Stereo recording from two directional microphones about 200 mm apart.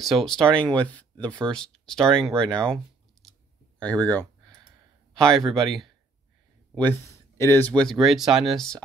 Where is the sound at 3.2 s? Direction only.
Centre (ahead or behind).